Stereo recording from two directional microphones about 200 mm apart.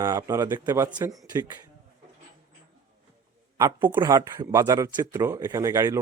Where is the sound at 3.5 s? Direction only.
15° right (ahead or behind).